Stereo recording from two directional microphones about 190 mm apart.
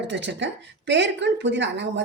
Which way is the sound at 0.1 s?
65° right (ahead or behind).